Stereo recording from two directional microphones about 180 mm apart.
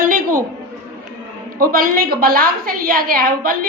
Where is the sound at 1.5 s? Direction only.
55° right (ahead or behind).